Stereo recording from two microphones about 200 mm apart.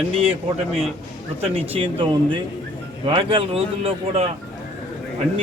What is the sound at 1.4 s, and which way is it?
A man's voice, 25° right (ahead or behind).